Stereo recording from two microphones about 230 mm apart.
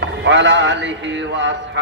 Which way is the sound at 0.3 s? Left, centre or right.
Right.